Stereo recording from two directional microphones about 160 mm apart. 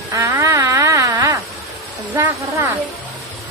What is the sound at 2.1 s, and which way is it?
Speech, 15° right (ahead or behind).